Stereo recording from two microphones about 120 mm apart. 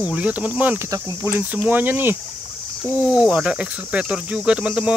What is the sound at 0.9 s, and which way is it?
Speech, 25° right (ahead or behind).